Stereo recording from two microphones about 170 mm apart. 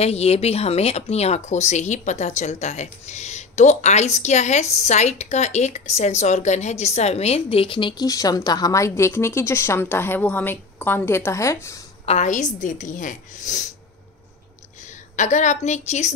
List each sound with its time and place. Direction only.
0.0 s a woman's voice: 40° left (ahead or behind); by 11.8 s 15° left (ahead or behind)
12.1 s speech: 45° left (ahead or behind)
14.8 s a woman's voice: 45° left (ahead or behind)